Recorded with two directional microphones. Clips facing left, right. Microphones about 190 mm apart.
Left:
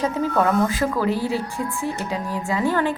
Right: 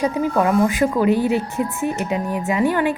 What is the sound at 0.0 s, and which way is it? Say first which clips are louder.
A woman's voice: right 2 dB; 15° right (ahead or behind).